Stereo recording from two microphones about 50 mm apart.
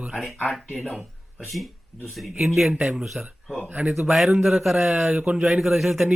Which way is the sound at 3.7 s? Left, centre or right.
Right.